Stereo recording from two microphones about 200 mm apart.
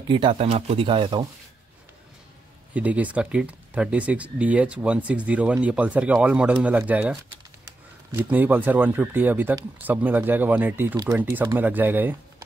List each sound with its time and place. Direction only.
0.1 s speech: 25° right (ahead or behind)
2.7 s speech: 5° right (ahead or behind)